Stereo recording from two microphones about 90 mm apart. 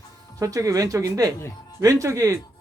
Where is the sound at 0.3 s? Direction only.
40° right (ahead or behind).